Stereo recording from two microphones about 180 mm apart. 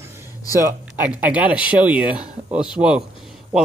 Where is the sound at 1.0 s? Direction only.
10° right (ahead or behind).